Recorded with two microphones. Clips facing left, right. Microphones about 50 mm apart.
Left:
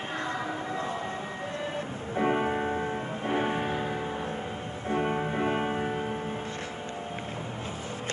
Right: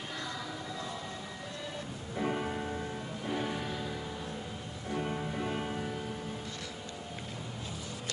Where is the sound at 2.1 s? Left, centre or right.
Left.